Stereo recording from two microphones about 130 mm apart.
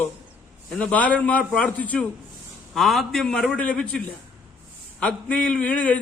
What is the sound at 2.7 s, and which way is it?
A man's voice, centre (ahead or behind).